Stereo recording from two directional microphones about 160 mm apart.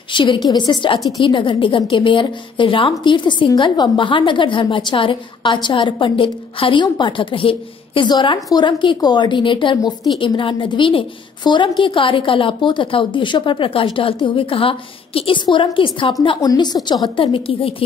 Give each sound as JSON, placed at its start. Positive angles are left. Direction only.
{"t": 0.1, "sound": "a woman's voice", "side_deg": 30}